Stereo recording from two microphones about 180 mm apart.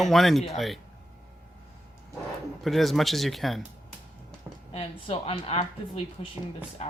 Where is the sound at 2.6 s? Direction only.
Centre (ahead or behind).